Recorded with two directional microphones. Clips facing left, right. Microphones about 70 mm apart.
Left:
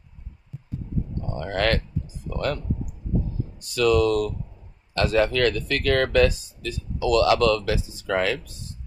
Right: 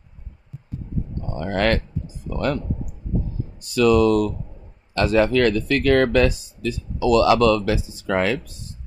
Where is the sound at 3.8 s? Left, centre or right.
Centre.